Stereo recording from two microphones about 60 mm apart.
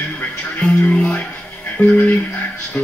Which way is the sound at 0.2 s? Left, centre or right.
Centre.